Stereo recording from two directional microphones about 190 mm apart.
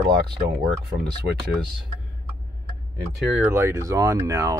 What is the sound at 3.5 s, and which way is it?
Speech, 15° right (ahead or behind).